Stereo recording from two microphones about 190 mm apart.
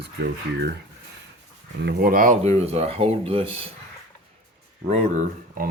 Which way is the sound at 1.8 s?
50° right (ahead or behind).